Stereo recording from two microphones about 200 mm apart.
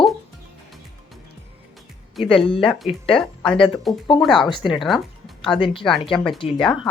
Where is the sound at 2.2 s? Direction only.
25° left (ahead or behind).